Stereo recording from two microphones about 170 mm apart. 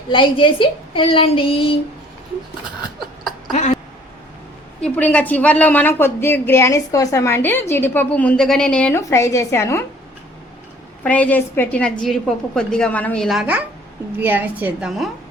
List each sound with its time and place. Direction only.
0.1 s speech: 30° left (ahead or behind)
3.5 s a sound: 45° left (ahead or behind)
4.8 s a woman's voice: 10° left (ahead or behind)
11.0 s a woman's voice: 10° left (ahead or behind)